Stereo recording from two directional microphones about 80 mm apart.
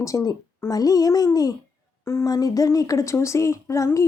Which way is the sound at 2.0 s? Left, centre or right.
Left.